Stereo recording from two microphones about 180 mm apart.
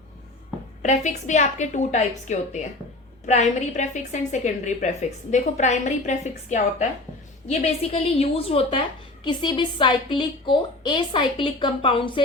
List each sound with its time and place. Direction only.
0.8 s a woman's voice: 40° left (ahead or behind)